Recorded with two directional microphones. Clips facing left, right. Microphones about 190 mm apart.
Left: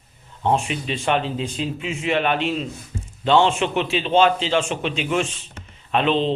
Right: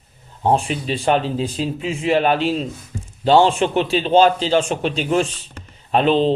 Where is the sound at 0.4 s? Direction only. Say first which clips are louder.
Right 3 dB; 35° right (ahead or behind).